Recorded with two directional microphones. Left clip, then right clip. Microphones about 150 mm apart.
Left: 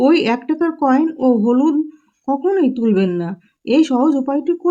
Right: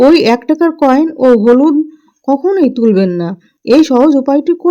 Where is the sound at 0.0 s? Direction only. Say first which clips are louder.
Right 7 dB; 35° right (ahead or behind).